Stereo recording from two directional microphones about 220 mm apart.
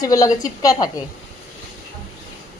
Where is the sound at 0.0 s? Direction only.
15° left (ahead or behind).